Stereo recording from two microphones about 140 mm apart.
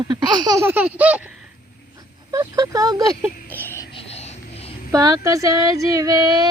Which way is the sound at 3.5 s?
15° left (ahead or behind).